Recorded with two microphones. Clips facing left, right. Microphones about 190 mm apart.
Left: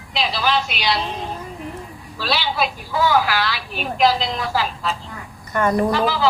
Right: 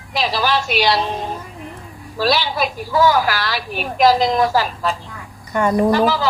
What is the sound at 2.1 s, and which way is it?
A woman's voice, 45° right (ahead or behind).